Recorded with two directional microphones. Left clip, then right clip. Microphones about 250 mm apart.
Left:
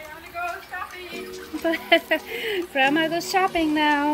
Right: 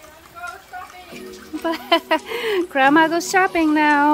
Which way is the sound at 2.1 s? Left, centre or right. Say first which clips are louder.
Right 5 dB; right.